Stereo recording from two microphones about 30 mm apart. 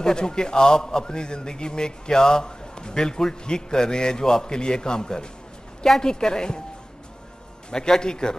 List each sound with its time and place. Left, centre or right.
0.0 s a man's voice: left
8.0 s a man's voice: left